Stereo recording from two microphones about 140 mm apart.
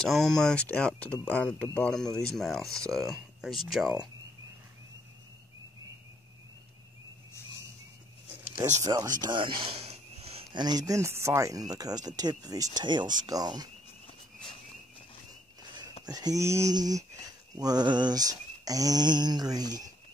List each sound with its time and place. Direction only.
0.0 s speech: 5° left (ahead or behind)
8.8 s speech: 25° right (ahead or behind); by 10.4 s 45° right (ahead or behind)
10.5 s speech: 30° right (ahead or behind)
16.1 s speech: 25° right (ahead or behind)